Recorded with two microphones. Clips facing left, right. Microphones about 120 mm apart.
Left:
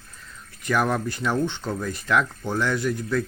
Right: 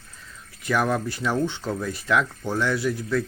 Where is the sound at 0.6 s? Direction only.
Centre (ahead or behind).